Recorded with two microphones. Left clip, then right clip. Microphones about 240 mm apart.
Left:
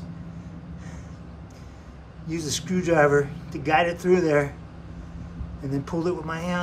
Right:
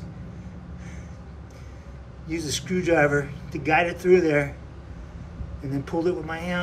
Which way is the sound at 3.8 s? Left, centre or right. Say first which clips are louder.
Right 2 dB; left.